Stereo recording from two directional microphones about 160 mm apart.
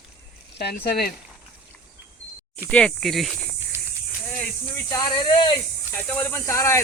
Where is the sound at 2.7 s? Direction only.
5° left (ahead or behind).